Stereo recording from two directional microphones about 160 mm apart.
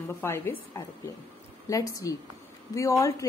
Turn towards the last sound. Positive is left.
turn(degrees=20)  # may be behind; listen again after turning